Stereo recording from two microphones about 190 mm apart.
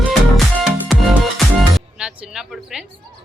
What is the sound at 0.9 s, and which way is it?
Music, centre (ahead or behind).